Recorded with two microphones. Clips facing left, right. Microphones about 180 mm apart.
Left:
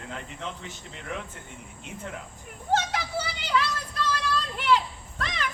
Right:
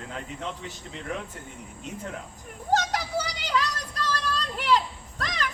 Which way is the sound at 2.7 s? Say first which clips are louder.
Right 1 dB; 40° right (ahead or behind).